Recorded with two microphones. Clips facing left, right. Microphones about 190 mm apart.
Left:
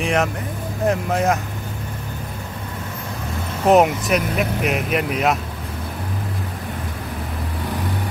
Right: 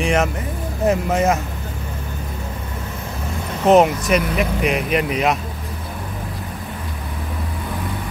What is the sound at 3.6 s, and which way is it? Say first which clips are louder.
Speech: right 1 dB; centre (ahead or behind).